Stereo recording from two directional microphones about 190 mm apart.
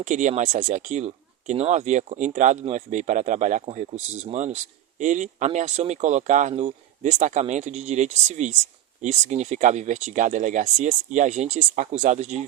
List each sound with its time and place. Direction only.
0.0 s speech: 40° right (ahead or behind)